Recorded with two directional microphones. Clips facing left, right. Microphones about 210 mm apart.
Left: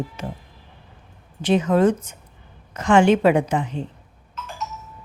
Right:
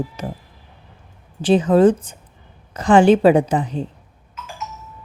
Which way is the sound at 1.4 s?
30° right (ahead or behind).